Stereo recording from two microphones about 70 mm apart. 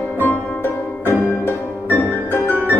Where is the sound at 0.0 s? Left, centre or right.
Left.